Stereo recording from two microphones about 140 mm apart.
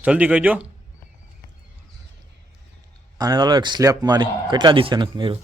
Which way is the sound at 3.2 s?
25° right (ahead or behind).